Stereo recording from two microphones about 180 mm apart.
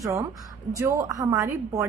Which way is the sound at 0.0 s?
20° right (ahead or behind).